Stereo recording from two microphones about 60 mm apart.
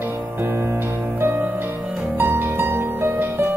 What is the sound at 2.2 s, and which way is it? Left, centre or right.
Harp, right.